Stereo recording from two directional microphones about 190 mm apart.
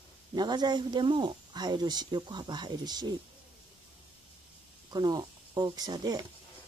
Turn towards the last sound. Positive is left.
turn(degrees=-20)  # may be behind; listen again after turning